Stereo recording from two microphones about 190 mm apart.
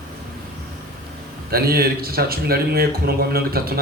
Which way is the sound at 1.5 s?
50° right (ahead or behind).